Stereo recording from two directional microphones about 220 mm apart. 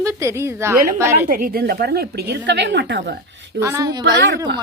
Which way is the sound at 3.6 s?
15° right (ahead or behind).